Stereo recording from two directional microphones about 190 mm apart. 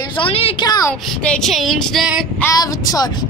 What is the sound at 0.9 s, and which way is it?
Speech, 5° left (ahead or behind).